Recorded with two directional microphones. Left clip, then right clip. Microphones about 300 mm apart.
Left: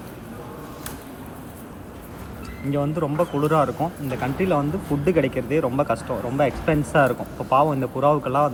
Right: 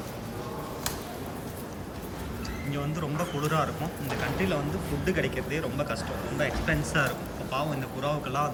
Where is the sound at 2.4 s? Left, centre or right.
Centre.